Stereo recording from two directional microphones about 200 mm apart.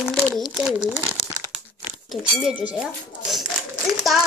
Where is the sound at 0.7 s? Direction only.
20° right (ahead or behind).